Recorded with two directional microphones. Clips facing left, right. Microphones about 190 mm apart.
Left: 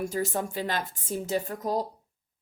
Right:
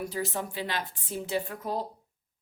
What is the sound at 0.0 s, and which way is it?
A woman's voice, 45° left (ahead or behind).